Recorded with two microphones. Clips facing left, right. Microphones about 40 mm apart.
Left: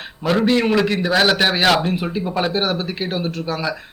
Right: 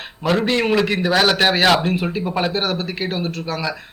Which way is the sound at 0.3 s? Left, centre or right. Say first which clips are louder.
Left 1 dB; centre.